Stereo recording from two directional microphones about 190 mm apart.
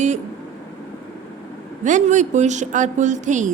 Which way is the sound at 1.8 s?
40° right (ahead or behind).